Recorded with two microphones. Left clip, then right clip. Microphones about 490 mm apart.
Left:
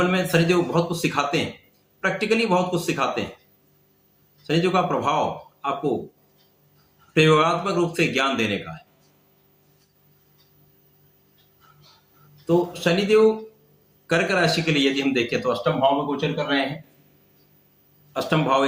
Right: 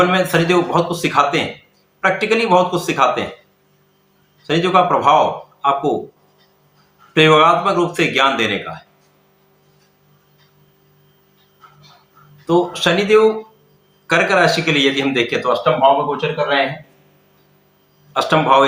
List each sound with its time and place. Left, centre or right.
0.1 s a man's voice: left
4.4 s a man's voice: left
7.1 s a man's voice: left
12.5 s a man's voice: left
18.1 s a man's voice: left